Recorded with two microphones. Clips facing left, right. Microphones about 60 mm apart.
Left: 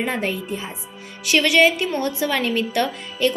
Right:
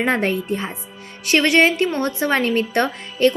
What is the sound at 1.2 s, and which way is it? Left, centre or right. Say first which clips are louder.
A woman's voice: right 1 dB; right.